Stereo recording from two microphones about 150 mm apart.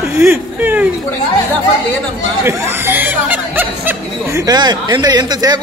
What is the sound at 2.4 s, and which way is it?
Speech, 15° right (ahead or behind).